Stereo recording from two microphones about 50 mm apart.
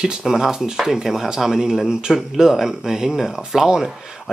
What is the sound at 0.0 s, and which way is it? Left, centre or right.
Speech, centre.